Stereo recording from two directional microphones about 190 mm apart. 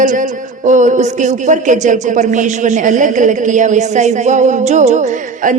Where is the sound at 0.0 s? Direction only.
45° right (ahead or behind).